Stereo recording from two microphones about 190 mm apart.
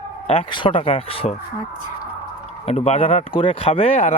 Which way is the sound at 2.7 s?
35° left (ahead or behind).